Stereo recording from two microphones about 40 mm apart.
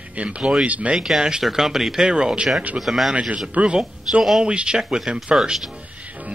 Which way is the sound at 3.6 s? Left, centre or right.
Right.